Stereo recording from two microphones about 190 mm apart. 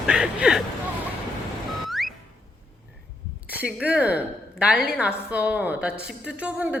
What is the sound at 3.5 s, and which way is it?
A woman's voice, 5° right (ahead or behind).